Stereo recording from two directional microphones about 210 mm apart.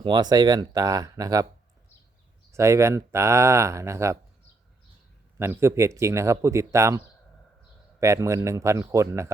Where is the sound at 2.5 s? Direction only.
15° right (ahead or behind).